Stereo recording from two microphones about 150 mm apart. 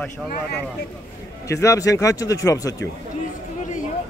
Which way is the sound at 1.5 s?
20° left (ahead or behind).